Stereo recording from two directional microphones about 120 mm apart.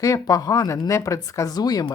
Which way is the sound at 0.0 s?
30° left (ahead or behind).